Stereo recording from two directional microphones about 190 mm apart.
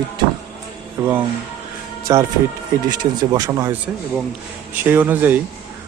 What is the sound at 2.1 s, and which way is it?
Speech, 20° right (ahead or behind).